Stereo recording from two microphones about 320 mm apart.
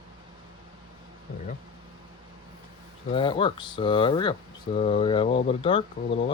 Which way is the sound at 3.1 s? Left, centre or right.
Centre.